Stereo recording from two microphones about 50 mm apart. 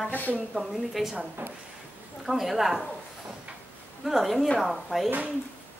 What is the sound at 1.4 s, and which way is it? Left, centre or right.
Speech, right.